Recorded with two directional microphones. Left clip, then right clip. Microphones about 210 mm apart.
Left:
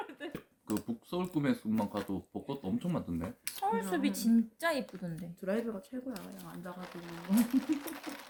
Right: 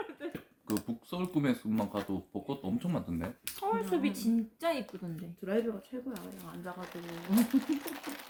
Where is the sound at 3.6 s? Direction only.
60° left (ahead or behind).